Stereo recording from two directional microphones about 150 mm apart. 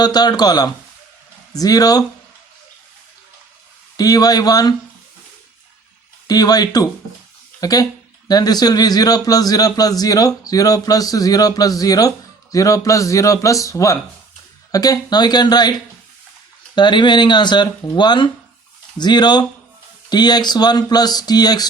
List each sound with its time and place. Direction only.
0.0 s a man's voice: 25° left (ahead or behind)
3.9 s a man's voice: 25° left (ahead or behind)
6.2 s a man's voice: 25° left (ahead or behind)
16.7 s a man's voice: 30° left (ahead or behind)